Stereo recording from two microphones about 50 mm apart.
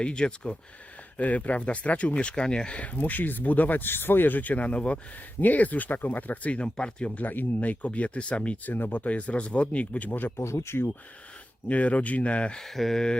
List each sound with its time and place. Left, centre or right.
0.0 s speech: centre
7.2 s speech: left
8.7 s speech: left
10.3 s speech: left
11.7 s speech: left
12.5 s speech: centre